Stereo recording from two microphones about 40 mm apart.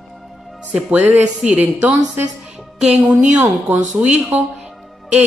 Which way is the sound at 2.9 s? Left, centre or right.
Right.